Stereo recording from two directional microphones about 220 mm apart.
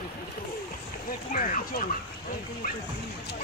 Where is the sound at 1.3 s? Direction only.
40° left (ahead or behind).